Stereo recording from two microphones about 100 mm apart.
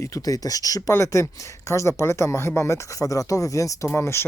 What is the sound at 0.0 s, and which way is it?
Speech, 35° left (ahead or behind).